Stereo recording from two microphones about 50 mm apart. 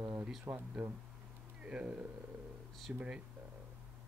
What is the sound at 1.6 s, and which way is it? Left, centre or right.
Speech, right.